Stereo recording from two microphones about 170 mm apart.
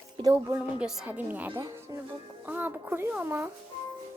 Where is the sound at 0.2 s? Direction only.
15° right (ahead or behind).